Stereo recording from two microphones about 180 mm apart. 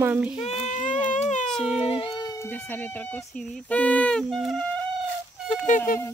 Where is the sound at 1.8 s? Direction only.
30° left (ahead or behind).